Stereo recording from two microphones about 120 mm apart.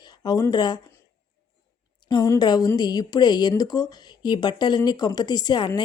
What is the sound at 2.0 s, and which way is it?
A woman's voice, 35° left (ahead or behind).